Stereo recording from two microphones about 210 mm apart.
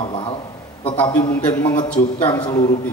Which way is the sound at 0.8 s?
25° left (ahead or behind).